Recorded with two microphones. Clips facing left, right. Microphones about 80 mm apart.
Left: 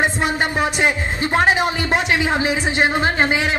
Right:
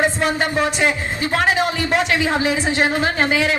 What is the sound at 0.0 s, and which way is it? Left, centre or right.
A man's voice, left.